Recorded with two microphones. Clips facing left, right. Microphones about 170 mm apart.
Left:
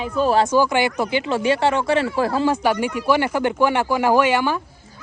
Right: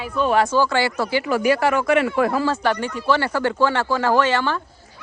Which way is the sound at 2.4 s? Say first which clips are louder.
Left 2 dB; 15° left (ahead or behind).